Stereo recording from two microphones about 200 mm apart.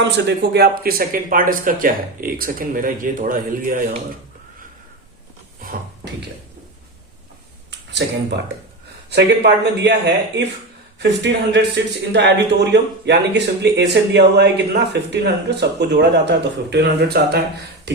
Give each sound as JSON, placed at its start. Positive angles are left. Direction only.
{"t": 0.0, "sound": "speech", "side_deg": -60}
{"t": 7.7, "sound": "a sound", "side_deg": -60}
{"t": 9.0, "sound": "speech", "side_deg": -60}
{"t": 11.0, "sound": "speech", "side_deg": -60}